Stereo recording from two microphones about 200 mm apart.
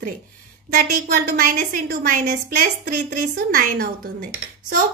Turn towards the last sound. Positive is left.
turn(degrees=-45)  # may be behind; listen again after turning